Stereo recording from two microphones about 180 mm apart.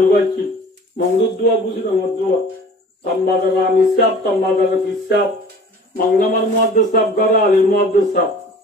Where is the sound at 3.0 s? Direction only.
55° left (ahead or behind).